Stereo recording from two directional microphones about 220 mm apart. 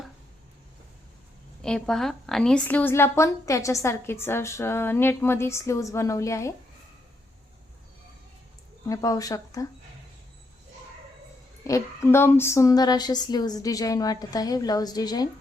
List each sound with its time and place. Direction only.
1.6 s a woman's voice: 5° left (ahead or behind)
8.9 s a woman's voice: 15° left (ahead or behind)
11.6 s a woman's voice: 15° left (ahead or behind)